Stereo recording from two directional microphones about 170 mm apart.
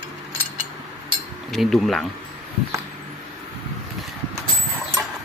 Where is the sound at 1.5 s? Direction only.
Centre (ahead or behind).